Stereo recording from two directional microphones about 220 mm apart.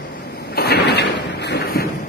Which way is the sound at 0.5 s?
45° left (ahead or behind).